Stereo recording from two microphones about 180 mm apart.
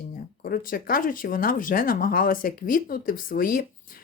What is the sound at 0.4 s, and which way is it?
Speech, 50° left (ahead or behind).